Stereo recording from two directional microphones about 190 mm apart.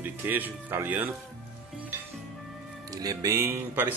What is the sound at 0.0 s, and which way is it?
Speech, 10° right (ahead or behind).